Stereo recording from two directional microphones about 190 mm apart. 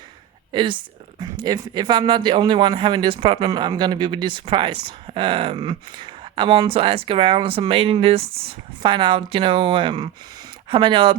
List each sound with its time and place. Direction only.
0.5 s speech: 25° right (ahead or behind)